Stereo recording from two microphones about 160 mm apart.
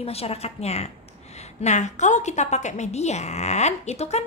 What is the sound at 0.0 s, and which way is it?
A woman's voice, 40° left (ahead or behind).